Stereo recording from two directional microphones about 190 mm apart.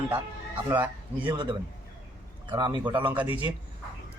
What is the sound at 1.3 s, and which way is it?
Speech, 25° right (ahead or behind).